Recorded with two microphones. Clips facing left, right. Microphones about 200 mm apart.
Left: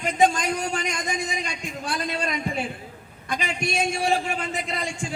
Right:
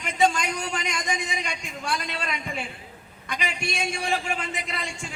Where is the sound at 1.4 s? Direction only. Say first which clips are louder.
Left 2 dB; 40° left (ahead or behind).